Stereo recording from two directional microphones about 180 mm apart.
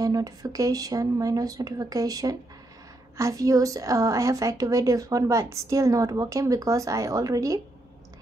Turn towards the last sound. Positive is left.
turn(degrees=-20)  # may be behind; listen again after turning